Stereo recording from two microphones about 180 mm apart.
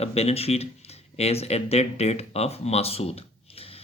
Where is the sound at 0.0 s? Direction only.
35° left (ahead or behind).